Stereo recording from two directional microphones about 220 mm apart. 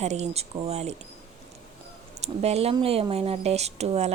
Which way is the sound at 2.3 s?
30° right (ahead or behind).